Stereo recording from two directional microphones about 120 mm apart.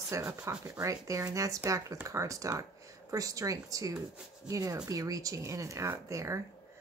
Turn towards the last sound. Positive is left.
turn(degrees=-25)  # may be behind; listen again after turning